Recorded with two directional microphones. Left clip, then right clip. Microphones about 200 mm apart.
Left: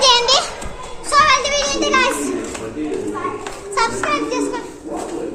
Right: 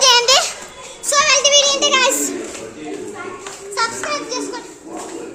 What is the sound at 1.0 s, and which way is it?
Music, 20° right (ahead or behind).